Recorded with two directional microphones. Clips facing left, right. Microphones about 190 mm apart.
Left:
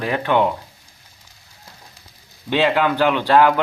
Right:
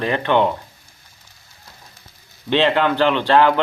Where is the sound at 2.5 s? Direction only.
5° left (ahead or behind).